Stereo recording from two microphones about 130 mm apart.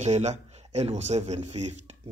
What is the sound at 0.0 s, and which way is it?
Speech, 60° right (ahead or behind).